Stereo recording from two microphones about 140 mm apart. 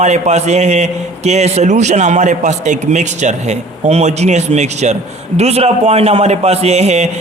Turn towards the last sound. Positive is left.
turn(degrees=-55)  # may be behind; listen again after turning